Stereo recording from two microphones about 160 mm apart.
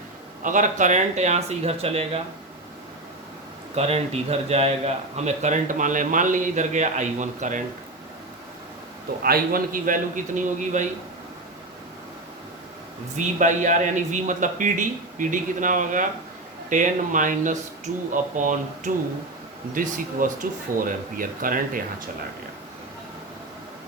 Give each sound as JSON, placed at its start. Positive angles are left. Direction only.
{"t": 0.4, "sound": "speech", "side_deg": -55}
{"t": 3.8, "sound": "speech", "side_deg": -40}
{"t": 9.2, "sound": "a man's voice", "side_deg": -70}
{"t": 13.1, "sound": "a man's voice", "side_deg": -50}